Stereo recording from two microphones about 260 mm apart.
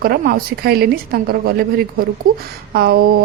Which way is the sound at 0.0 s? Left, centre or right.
Right.